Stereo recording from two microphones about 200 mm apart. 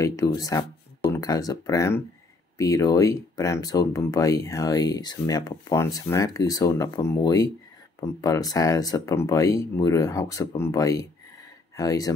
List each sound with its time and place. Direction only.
0.0 s speech: 15° left (ahead or behind)